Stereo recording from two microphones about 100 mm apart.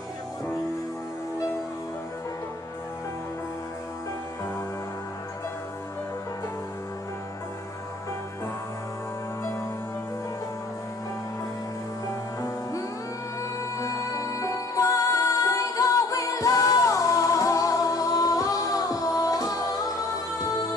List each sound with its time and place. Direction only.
12.4 s music: 30° left (ahead or behind)